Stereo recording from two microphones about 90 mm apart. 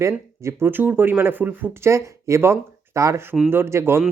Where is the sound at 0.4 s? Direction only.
25° right (ahead or behind).